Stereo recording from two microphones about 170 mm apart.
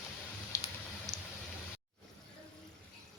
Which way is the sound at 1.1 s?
Centre (ahead or behind).